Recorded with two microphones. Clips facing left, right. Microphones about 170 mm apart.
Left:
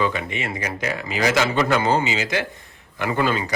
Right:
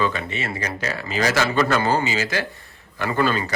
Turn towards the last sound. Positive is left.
turn(degrees=15)  # may be behind; listen again after turning